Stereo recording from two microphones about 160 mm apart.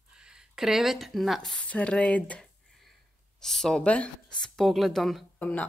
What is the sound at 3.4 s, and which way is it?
Speech, 5° left (ahead or behind).